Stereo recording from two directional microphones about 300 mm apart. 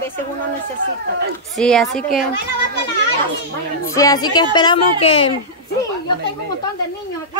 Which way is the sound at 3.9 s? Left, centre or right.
Centre.